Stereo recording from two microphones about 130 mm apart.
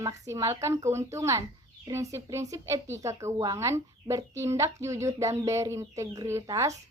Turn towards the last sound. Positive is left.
turn(degrees=-25)  # may be behind; listen again after turning